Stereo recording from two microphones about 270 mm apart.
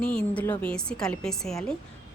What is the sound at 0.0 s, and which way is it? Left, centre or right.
A woman's voice, centre.